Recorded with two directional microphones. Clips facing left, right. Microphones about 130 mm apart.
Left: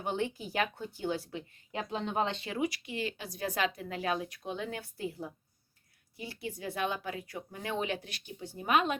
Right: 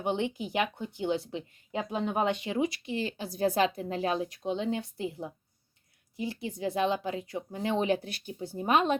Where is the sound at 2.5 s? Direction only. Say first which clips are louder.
Right 4 dB; 30° right (ahead or behind).